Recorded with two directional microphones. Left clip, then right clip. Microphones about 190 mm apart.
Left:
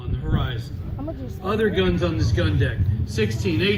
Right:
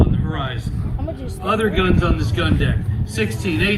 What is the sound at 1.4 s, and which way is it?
Speech, 30° right (ahead or behind).